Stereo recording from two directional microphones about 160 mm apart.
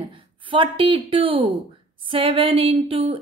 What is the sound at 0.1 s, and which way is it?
A woman's voice, 30° right (ahead or behind).